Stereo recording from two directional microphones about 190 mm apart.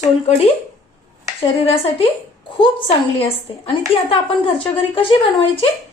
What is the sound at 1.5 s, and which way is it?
Speech, 30° left (ahead or behind).